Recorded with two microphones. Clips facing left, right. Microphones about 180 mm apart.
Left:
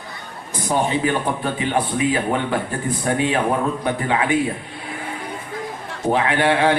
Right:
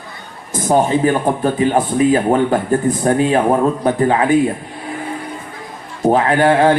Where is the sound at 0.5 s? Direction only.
45° right (ahead or behind).